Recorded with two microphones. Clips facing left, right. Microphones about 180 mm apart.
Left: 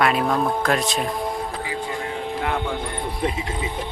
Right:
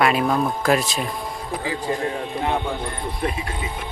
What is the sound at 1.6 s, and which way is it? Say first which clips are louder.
Speech: right 3 dB; 35° right (ahead or behind).